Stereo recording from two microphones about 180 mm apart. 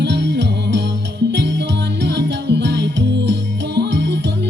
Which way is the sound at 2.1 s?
70° right (ahead or behind).